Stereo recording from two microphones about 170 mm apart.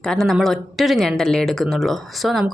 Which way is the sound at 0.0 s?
Centre (ahead or behind).